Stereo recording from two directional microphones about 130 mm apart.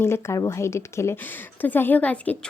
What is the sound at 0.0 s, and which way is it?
Speech, 20° left (ahead or behind).